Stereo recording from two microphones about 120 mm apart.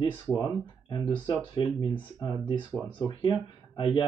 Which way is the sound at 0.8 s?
40° left (ahead or behind).